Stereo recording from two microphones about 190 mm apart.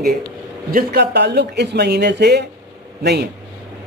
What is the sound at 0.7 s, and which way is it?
Speech, 55° right (ahead or behind).